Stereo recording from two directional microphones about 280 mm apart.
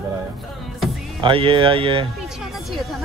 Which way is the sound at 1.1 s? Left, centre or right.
Centre.